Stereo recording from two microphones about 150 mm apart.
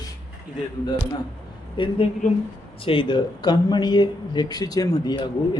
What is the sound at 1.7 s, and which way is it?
A woman's voice, 35° left (ahead or behind).